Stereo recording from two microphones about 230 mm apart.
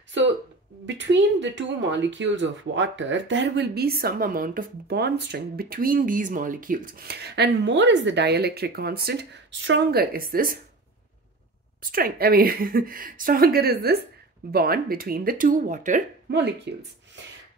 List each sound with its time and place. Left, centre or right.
0.8 s speech: right
11.8 s a woman's voice: right
16.3 s speech: right